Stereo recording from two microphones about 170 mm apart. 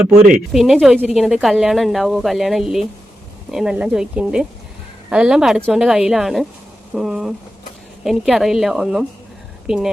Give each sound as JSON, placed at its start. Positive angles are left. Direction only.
{"t": 0.3, "sound": "a woman's voice", "side_deg": 0}